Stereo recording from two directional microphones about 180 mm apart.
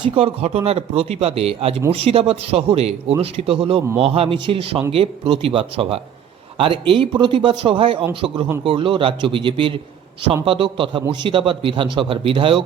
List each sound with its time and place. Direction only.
0.0 s a man's voice: 35° right (ahead or behind)